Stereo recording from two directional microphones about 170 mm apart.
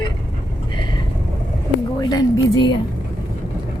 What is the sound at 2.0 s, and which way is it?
Speech, 25° left (ahead or behind).